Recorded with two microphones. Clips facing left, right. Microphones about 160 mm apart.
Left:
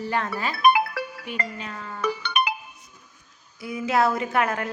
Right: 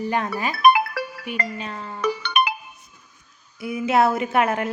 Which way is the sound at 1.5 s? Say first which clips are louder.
Right 3 dB; 30° right (ahead or behind).